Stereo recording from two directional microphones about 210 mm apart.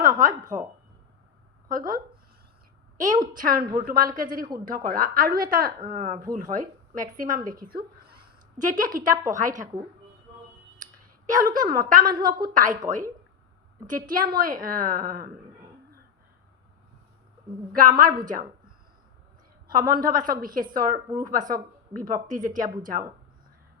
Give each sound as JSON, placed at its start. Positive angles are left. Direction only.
{"t": 0.0, "sound": "speech", "side_deg": -40}
{"t": 1.7, "sound": "speech", "side_deg": -40}
{"t": 3.3, "sound": "a woman's voice", "side_deg": -45}
{"t": 11.3, "sound": "a woman's voice", "side_deg": -40}
{"t": 13.8, "sound": "speech", "side_deg": -40}
{"t": 17.7, "sound": "a woman's voice", "side_deg": -45}
{"t": 19.6, "sound": "speech", "side_deg": -45}